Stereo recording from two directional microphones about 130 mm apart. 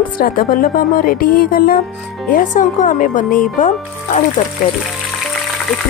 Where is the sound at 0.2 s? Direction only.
90° left.